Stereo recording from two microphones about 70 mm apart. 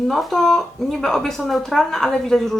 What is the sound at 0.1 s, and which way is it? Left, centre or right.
A woman's voice, centre.